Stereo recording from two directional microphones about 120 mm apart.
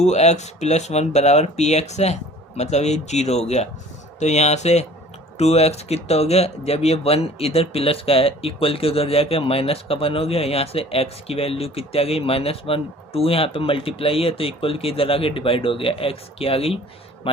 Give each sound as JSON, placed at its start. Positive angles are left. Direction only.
{"t": 0.0, "sound": "speech", "side_deg": 70}